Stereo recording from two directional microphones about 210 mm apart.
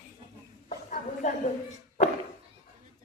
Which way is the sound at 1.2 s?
35° left (ahead or behind).